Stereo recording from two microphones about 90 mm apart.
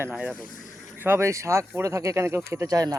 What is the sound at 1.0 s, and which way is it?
Speech, 25° right (ahead or behind).